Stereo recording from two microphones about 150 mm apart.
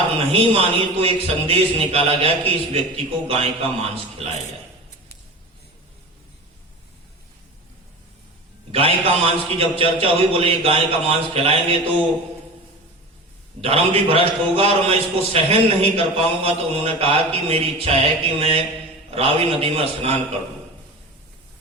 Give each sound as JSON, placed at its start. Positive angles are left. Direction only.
{"t": 0.2, "sound": "a man's voice", "side_deg": -40}
{"t": 8.7, "sound": "a man's voice", "side_deg": -40}
{"t": 13.6, "sound": "a man's voice", "side_deg": -40}